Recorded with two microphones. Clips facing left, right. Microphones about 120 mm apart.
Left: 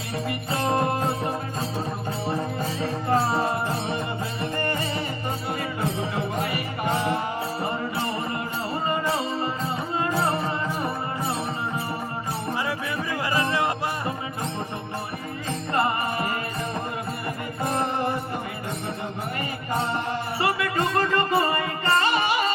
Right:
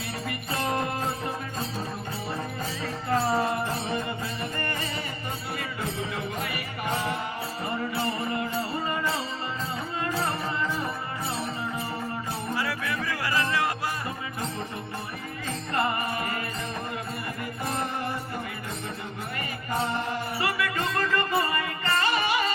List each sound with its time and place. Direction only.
0.3 s music: 30° left (ahead or behind)
2.8 s music: 30° left (ahead or behind)
6.0 s music: 30° left (ahead or behind)
8.9 s music: 25° left (ahead or behind)
12.5 s music: 25° left (ahead or behind)
15.7 s music: 30° left (ahead or behind)
20.4 s music: 30° left (ahead or behind)